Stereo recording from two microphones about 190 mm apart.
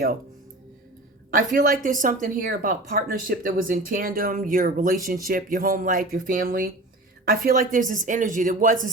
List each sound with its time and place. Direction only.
1.3 s speech: 45° right (ahead or behind)